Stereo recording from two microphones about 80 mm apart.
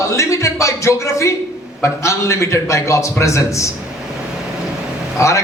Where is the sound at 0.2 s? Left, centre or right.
Left.